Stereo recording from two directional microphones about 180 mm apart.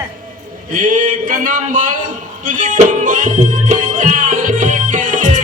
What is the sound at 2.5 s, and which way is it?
Music, 45° right (ahead or behind).